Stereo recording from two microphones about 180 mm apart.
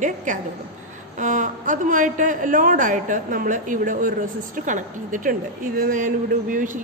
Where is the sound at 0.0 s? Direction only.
45° right (ahead or behind).